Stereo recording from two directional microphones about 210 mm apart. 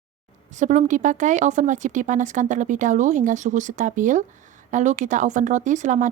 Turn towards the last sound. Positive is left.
turn(degrees=-35)  # may be behind; listen again after turning